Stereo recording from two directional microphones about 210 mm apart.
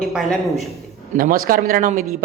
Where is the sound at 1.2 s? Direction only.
40° right (ahead or behind).